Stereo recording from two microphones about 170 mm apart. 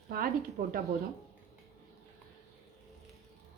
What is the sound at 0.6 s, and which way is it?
Speech, 55° right (ahead or behind).